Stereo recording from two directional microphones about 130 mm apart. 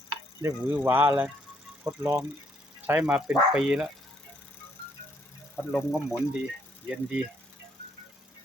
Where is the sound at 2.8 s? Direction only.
10° right (ahead or behind).